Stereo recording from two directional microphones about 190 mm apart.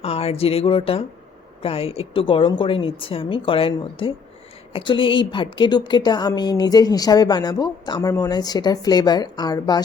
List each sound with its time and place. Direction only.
0.0 s speech: 30° left (ahead or behind)